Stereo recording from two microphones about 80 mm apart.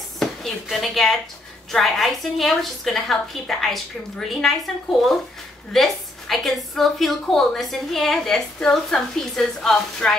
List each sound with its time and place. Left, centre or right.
0.2 s a woman's voice: centre
5.7 s a woman's voice: centre